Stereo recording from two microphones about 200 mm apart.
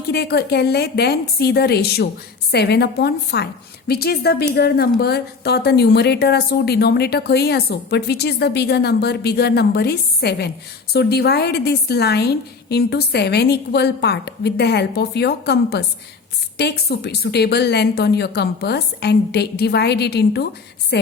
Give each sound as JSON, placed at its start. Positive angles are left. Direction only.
{"t": 0.1, "sound": "a woman's voice", "side_deg": 55}